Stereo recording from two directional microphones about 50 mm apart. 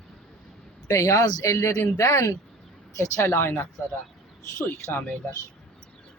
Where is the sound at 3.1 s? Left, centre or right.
Left.